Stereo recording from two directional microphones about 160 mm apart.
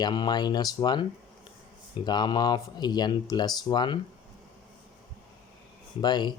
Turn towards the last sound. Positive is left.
turn(degrees=25)  # may be behind; listen again after turning